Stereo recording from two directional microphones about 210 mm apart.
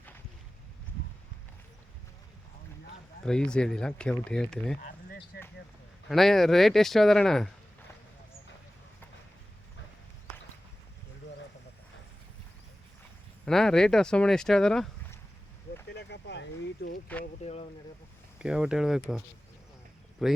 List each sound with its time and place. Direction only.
3.2 s speech: 5° left (ahead or behind)
4.8 s a sound: 50° left (ahead or behind)
6.1 s speech: centre (ahead or behind)
13.4 s speech: centre (ahead or behind)
15.9 s a sound: 55° left (ahead or behind)
17.4 s speech: 30° left (ahead or behind)
18.3 s speech: 5° right (ahead or behind)
20.2 s speech: centre (ahead or behind)